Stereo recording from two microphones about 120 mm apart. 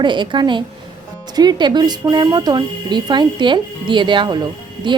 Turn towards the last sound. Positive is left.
turn(degrees=-35)  # may be behind; listen again after turning